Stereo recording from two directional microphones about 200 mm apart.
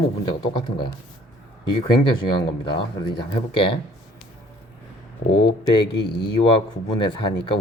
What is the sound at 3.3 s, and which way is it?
Speech, 25° left (ahead or behind).